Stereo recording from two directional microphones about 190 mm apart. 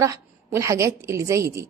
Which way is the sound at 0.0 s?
15° right (ahead or behind).